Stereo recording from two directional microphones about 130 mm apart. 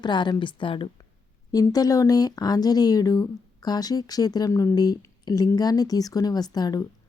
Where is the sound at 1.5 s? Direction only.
30° left (ahead or behind).